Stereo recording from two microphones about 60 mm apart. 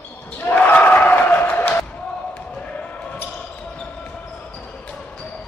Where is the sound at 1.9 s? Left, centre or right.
Left.